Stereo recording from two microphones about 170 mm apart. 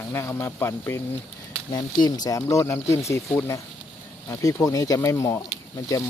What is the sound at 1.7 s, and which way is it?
Speech, 25° left (ahead or behind).